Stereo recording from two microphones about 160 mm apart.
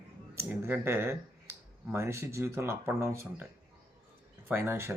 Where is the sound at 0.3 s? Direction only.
15° right (ahead or behind).